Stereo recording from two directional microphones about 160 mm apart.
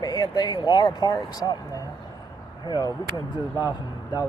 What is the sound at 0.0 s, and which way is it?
Speech, 25° left (ahead or behind).